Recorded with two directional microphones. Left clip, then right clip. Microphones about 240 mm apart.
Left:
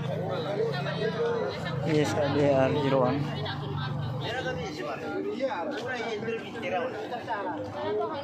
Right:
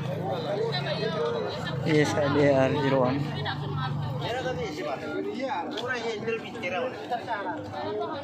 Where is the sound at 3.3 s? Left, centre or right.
Right.